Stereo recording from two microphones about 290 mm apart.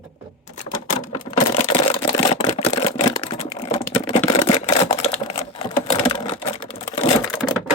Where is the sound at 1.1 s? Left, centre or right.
Centre.